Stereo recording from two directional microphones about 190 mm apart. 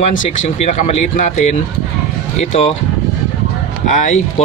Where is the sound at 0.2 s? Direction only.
40° left (ahead or behind).